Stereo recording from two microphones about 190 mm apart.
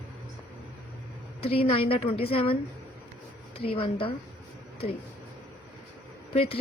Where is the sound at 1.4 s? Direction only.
30° left (ahead or behind).